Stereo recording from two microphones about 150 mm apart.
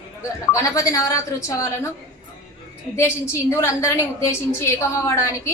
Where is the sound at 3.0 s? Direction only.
15° left (ahead or behind).